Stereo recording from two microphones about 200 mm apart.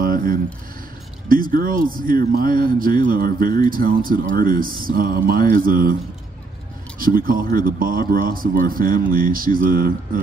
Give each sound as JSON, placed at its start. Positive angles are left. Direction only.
{"t": 0.0, "sound": "a sound", "side_deg": -45}
{"t": 1.3, "sound": "speech", "side_deg": -45}
{"t": 7.0, "sound": "speech", "side_deg": -45}